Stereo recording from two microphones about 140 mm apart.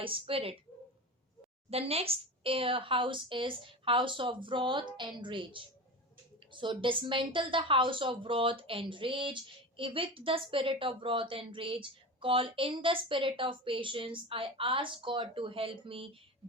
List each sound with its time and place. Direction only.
0.0 s a woman's voice: 40° right (ahead or behind)
1.7 s a woman's voice: 45° right (ahead or behind)